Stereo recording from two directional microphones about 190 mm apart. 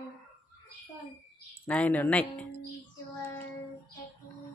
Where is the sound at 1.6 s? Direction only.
5° left (ahead or behind).